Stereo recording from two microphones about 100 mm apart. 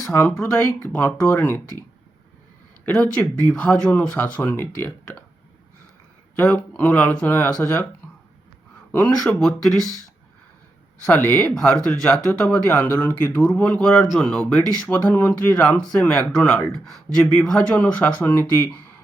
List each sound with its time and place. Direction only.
0.0 s speech: 25° left (ahead or behind)
0.9 s speech: 15° left (ahead or behind)
2.8 s speech: 15° left (ahead or behind)
6.4 s speech: 10° left (ahead or behind)
8.9 s speech: 15° left (ahead or behind)
11.0 s speech: 15° left (ahead or behind)
11.5 s speech: 5° left (ahead or behind)